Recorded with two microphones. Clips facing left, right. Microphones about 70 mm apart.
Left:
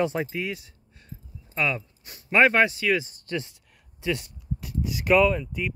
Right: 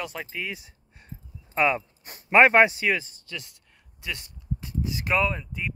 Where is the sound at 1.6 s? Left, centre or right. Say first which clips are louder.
Right 4 dB; right.